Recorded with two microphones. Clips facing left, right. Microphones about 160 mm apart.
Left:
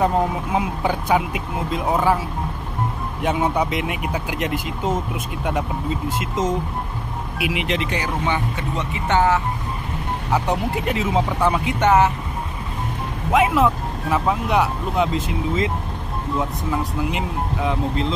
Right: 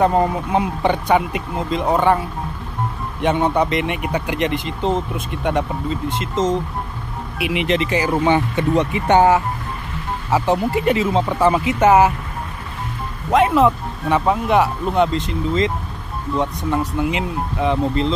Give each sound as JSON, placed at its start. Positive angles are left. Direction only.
{"t": 0.0, "sound": "speech", "side_deg": 0}
{"t": 9.0, "sound": "speech", "side_deg": -15}
{"t": 10.3, "sound": "speech", "side_deg": 0}
{"t": 13.3, "sound": "speech", "side_deg": 0}